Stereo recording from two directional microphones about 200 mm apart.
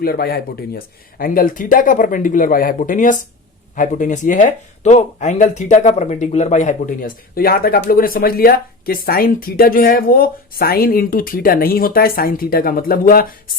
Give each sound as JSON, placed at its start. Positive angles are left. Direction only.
{"t": 0.0, "sound": "speech", "side_deg": 50}